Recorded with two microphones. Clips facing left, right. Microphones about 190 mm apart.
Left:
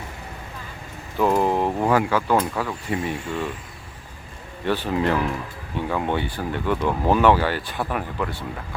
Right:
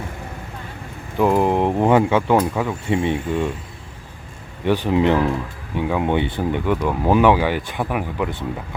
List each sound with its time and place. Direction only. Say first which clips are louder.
1.2 s speech: right 3 dB; 15° right (ahead or behind)
4.6 s speech: right 5 dB; 15° right (ahead or behind)